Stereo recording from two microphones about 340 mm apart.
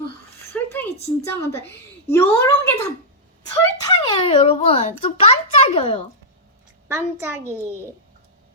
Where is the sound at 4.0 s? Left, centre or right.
Centre.